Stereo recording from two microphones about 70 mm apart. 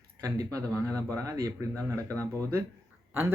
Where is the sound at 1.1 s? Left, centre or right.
Right.